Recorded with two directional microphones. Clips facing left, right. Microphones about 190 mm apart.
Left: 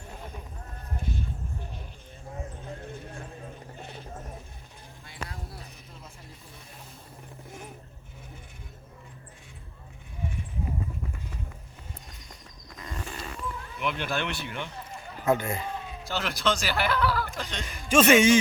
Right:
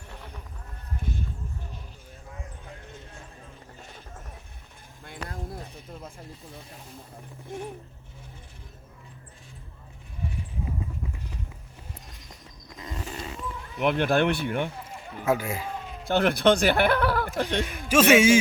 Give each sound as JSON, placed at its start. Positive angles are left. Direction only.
{"t": 5.0, "sound": "a sound", "side_deg": -50}
{"t": 12.7, "sound": "wild animals", "side_deg": -20}
{"t": 13.7, "sound": "speech", "side_deg": -55}
{"t": 15.2, "sound": "speech", "side_deg": -5}
{"t": 16.0, "sound": "speech", "side_deg": -55}
{"t": 17.8, "sound": "a man's voice", "side_deg": -5}